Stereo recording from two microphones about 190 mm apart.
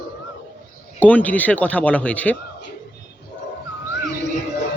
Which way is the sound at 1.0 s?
10° left (ahead or behind).